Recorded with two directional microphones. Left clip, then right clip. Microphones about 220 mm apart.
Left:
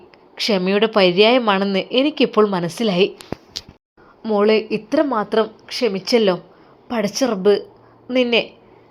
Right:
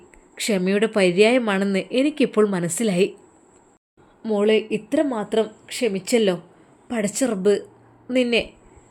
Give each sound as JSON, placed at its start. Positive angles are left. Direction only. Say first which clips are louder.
{"t": 0.3, "sound": "speech", "louder": "left 4 dB", "side_deg": -15}
{"t": 4.2, "sound": "a woman's voice", "louder": "left 3 dB", "side_deg": -5}